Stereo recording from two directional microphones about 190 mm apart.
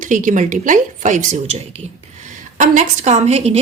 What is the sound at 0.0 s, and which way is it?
A woman's voice, 45° right (ahead or behind).